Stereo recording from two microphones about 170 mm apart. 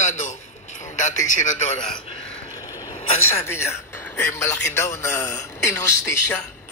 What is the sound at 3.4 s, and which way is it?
A man's voice, 15° left (ahead or behind).